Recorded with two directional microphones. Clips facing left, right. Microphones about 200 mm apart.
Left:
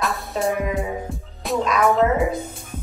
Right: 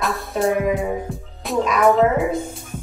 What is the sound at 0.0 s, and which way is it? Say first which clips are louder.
Music: right 2 dB; centre (ahead or behind).